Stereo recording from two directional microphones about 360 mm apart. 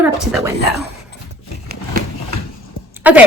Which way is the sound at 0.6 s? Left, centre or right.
Right.